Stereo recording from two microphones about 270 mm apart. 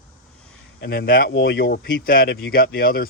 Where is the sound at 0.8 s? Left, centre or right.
Left.